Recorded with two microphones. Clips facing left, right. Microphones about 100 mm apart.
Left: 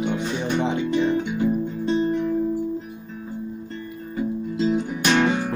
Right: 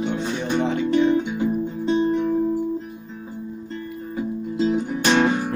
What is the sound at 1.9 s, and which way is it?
Music, centre (ahead or behind).